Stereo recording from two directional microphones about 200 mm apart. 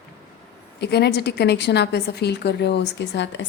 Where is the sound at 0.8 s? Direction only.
55° left (ahead or behind).